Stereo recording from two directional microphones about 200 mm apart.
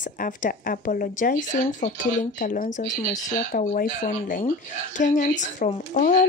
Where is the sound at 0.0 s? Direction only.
40° left (ahead or behind).